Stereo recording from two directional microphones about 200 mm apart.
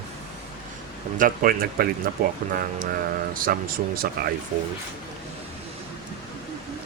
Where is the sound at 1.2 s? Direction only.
45° right (ahead or behind).